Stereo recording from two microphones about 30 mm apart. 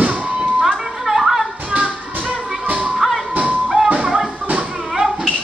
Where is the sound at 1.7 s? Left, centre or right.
Right.